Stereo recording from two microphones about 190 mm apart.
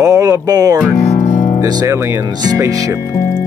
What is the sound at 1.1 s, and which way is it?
Guitar, 40° left (ahead or behind).